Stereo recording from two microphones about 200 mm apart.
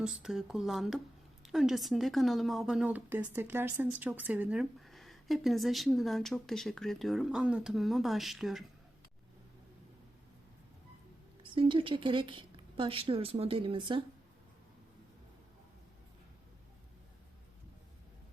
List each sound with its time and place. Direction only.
0.0 s speech: 5° right (ahead or behind)
11.5 s a woman's voice: 25° right (ahead or behind)